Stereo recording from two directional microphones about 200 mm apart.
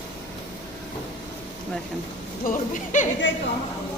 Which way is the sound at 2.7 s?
40° left (ahead or behind).